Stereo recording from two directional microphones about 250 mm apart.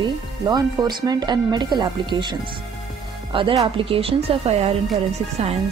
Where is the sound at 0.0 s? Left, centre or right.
Centre.